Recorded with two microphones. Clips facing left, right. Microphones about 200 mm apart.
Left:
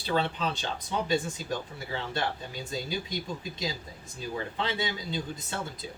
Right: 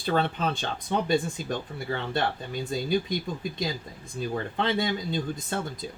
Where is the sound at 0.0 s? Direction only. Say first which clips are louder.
Right 3 dB; 50° right (ahead or behind).